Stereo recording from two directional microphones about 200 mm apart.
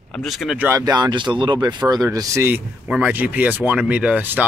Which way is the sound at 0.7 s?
15° right (ahead or behind).